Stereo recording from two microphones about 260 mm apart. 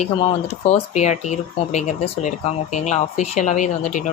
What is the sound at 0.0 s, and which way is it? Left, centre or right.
Speech, left.